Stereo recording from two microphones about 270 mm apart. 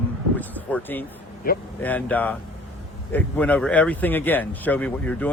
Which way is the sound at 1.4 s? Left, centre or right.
Left.